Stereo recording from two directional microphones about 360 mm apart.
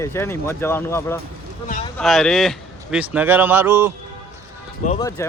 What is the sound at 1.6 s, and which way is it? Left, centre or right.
Speech, left.